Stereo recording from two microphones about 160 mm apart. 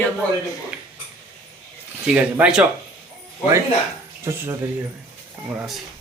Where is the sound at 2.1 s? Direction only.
10° right (ahead or behind).